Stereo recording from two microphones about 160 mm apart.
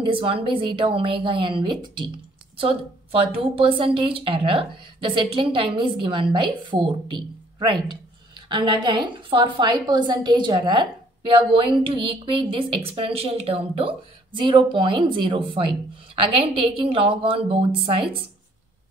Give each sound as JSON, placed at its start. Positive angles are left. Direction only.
{"t": 0.0, "sound": "a woman's voice", "side_deg": -35}